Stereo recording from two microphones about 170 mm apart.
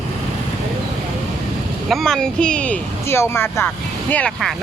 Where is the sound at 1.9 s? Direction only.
Centre (ahead or behind).